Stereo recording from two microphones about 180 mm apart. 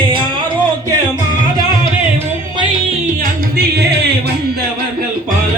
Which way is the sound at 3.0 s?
55° right (ahead or behind).